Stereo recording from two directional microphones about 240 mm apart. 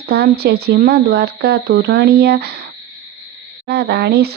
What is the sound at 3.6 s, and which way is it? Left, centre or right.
Speech, right.